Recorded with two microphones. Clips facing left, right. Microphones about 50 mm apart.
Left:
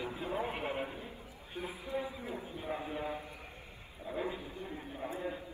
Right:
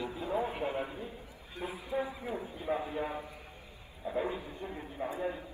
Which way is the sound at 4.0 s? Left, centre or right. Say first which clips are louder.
Right 4 dB; centre.